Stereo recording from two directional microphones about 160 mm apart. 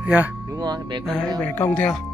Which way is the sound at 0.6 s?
25° right (ahead or behind).